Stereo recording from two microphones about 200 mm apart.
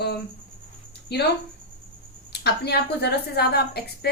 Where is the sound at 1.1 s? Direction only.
55° left (ahead or behind).